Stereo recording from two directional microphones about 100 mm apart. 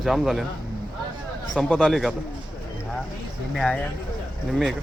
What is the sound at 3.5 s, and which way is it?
Speech, 5° left (ahead or behind).